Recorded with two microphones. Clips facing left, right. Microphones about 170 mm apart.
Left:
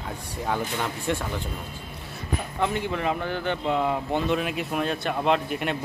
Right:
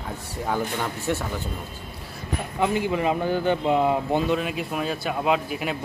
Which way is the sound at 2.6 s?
10° right (ahead or behind).